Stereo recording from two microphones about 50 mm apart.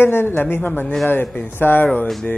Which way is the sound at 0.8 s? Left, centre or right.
Centre.